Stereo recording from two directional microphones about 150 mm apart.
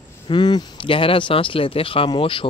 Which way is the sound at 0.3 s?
30° left (ahead or behind).